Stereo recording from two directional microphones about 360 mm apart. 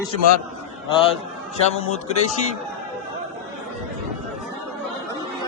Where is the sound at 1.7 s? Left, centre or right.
Centre.